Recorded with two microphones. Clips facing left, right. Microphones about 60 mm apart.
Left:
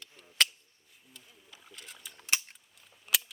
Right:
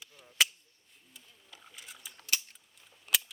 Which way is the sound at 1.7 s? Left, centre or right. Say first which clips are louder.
Left 1 dB; centre.